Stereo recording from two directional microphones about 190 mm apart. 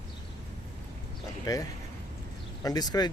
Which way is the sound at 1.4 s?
20° left (ahead or behind).